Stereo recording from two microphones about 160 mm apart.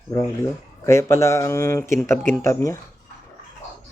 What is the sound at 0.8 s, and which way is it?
Speech, 15° left (ahead or behind).